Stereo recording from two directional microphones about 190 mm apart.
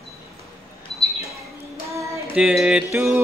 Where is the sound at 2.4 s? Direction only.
5° right (ahead or behind).